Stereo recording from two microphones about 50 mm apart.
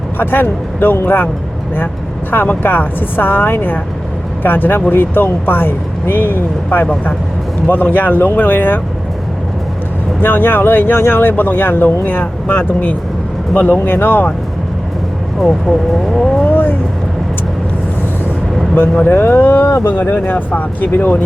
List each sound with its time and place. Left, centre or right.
0.2 s speech: left
2.3 s speech: left
7.7 s speech: left
10.2 s speech: left
16.1 s speech: centre
16.5 s vehicle: left
19.0 s speech: left